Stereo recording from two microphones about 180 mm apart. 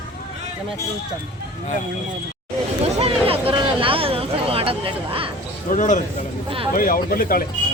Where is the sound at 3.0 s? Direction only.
30° right (ahead or behind).